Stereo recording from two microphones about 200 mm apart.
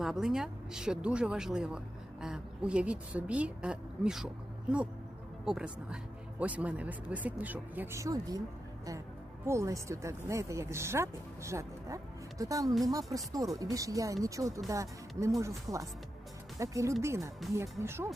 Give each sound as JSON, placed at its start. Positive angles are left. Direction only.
{"t": 0.0, "sound": "a woman's voice", "side_deg": 0}
{"t": 5.5, "sound": "a woman's voice", "side_deg": -5}
{"t": 9.5, "sound": "speech", "side_deg": -15}